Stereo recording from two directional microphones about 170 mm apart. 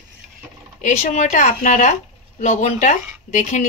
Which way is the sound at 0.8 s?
45° left (ahead or behind).